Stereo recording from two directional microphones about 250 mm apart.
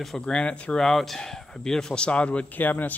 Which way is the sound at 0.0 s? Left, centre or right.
Centre.